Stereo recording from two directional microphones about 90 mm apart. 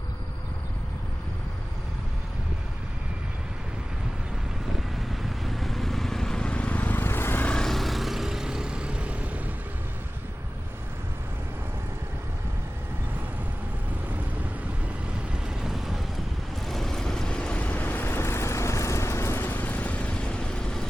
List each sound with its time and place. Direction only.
5.4 s vehicle: centre (ahead or behind); by 7.5 s 25° left (ahead or behind)
7.5 s vehicle: 5° left (ahead or behind); by 9.4 s 15° right (ahead or behind)
15.4 s vehicle: 5° right (ahead or behind)